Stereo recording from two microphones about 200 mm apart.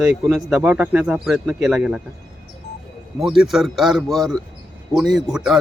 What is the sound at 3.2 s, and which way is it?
Speech, centre (ahead or behind).